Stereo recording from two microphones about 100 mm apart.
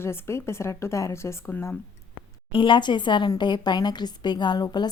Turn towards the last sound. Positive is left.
turn(degrees=45)  # may be behind; listen again after turning